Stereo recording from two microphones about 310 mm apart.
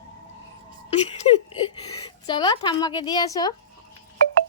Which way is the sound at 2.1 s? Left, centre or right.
Centre.